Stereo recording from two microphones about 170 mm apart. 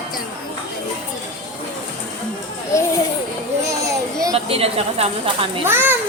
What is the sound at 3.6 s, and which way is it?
Children playing, 20° right (ahead or behind).